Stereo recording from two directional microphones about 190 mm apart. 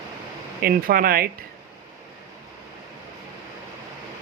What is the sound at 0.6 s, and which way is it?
Speech, 50° right (ahead or behind).